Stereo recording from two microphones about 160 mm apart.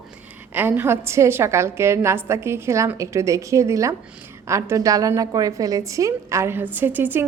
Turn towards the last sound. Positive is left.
turn(degrees=-10)  # may be behind; listen again after turning